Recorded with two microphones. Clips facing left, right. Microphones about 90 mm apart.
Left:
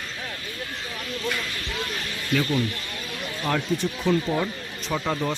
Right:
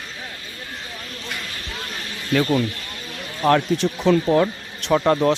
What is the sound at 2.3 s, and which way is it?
Speech, 65° right (ahead or behind).